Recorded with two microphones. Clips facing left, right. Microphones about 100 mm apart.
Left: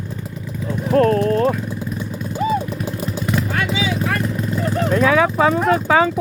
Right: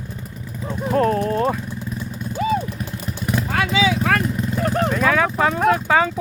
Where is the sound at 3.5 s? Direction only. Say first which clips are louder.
Right 2 dB; 80° right.